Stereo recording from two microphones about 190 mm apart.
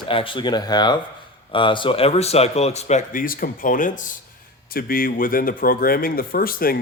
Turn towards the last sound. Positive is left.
turn(degrees=50)  # may be behind; listen again after turning